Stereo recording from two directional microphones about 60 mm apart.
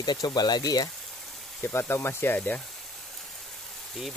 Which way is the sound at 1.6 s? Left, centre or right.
Left.